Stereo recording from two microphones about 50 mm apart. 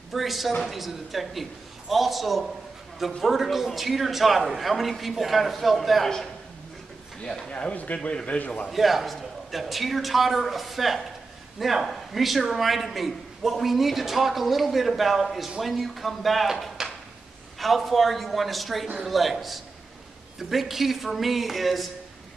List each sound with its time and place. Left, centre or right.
0.1 s a man's voice: centre
7.2 s speech: centre
7.5 s speech: left
8.6 s a man's voice: centre